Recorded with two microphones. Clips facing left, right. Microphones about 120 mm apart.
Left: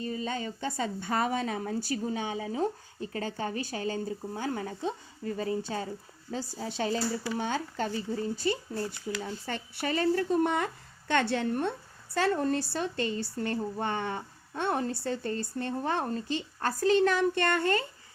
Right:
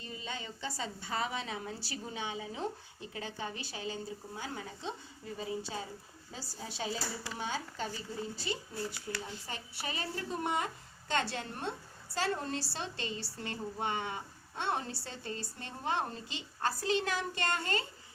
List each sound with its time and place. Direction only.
0.0 s speech: 45° left (ahead or behind)
3.1 s a woman's voice: 50° left (ahead or behind)